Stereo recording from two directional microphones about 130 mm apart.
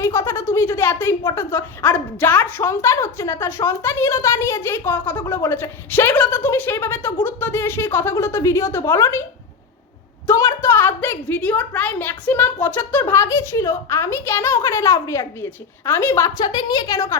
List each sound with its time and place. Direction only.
0.0 s a woman's voice: 20° left (ahead or behind)
10.2 s a woman's voice: 20° left (ahead or behind)